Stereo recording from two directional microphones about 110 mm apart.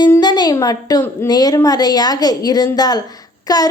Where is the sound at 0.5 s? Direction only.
35° left (ahead or behind).